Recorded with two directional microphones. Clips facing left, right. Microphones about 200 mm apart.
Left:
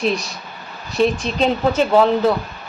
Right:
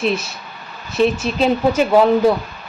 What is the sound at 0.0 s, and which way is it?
Speech, 5° right (ahead or behind).